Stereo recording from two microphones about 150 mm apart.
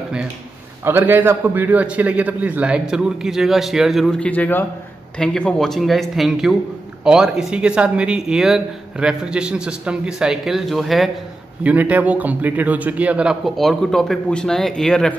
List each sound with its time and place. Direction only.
0.8 s speech: 15° right (ahead or behind)
11.6 s a man's voice: 10° right (ahead or behind); by 15.1 s 5° left (ahead or behind)